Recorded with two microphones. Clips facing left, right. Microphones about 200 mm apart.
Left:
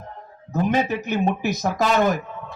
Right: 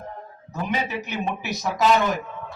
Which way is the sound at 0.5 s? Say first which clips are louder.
Left 6 dB; 45° left (ahead or behind).